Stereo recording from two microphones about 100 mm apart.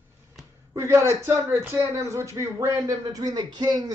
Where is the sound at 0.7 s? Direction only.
25° right (ahead or behind).